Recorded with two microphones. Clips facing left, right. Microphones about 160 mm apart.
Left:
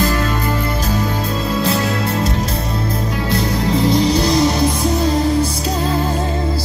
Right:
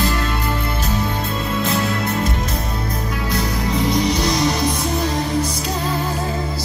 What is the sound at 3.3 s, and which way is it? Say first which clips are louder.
Music: left 4 dB; 30° left (ahead or behind).